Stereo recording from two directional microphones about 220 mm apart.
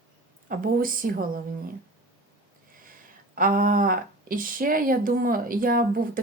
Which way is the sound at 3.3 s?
40° right (ahead or behind).